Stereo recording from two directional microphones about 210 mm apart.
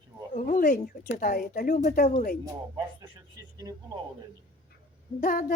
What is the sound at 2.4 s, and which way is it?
Speech, 15° right (ahead or behind).